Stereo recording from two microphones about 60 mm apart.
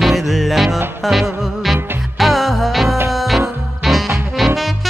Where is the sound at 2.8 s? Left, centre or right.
Right.